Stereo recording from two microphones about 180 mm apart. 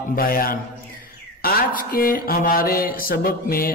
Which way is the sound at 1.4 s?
55° left (ahead or behind).